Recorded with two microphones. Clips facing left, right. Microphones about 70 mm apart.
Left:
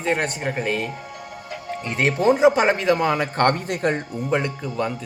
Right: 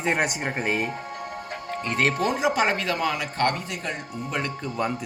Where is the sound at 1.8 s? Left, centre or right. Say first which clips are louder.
Left 4 dB; centre.